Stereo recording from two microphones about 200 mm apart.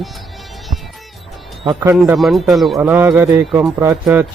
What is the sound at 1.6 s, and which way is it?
Speech, 15° right (ahead or behind).